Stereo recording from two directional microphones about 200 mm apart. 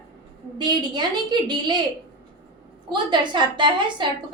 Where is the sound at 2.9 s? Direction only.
25° right (ahead or behind).